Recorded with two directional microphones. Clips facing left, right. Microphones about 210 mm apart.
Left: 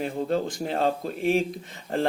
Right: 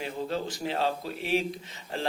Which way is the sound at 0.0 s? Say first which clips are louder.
Left 6 dB; 50° left (ahead or behind).